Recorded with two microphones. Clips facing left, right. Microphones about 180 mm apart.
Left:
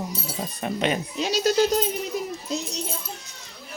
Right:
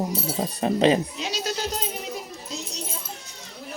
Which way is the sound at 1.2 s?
40° left (ahead or behind).